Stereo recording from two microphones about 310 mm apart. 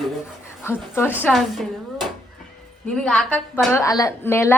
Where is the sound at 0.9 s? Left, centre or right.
Centre.